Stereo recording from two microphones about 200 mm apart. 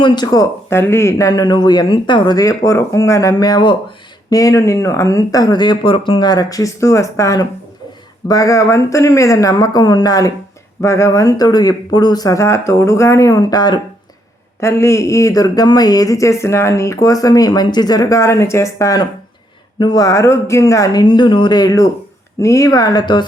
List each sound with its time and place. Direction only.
0.0 s a man's voice: 20° left (ahead or behind)